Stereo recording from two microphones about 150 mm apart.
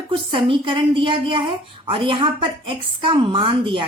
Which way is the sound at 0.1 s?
35° right (ahead or behind).